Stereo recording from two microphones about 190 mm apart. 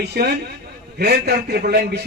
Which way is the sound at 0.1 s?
55° right (ahead or behind).